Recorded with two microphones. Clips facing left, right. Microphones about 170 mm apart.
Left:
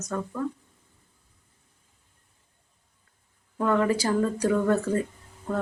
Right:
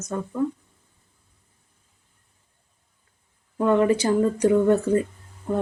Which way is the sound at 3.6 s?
20° right (ahead or behind).